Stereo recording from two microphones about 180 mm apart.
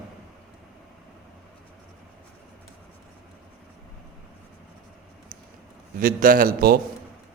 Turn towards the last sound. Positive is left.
turn(degrees=-55)  # may be behind; listen again after turning